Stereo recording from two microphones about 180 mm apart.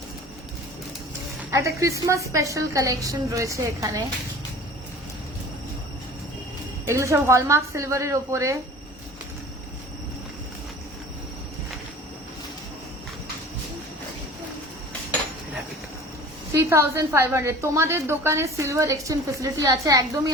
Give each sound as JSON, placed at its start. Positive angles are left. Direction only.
{"t": 1.5, "sound": "a woman's voice", "side_deg": -15}
{"t": 6.8, "sound": "a woman's voice", "side_deg": -15}
{"t": 16.6, "sound": "a woman's voice", "side_deg": -15}